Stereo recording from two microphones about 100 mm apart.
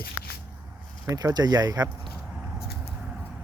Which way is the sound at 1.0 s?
40° right (ahead or behind).